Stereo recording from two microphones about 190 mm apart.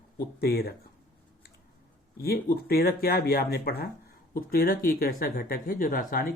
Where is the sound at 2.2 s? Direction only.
55° left (ahead or behind).